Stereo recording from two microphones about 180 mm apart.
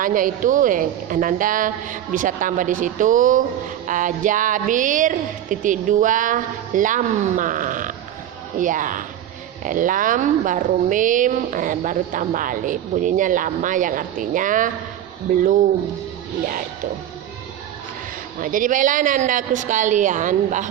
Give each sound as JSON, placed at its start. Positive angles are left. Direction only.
{"t": 0.0, "sound": "speech", "side_deg": -50}
{"t": 18.3, "sound": "speech", "side_deg": -50}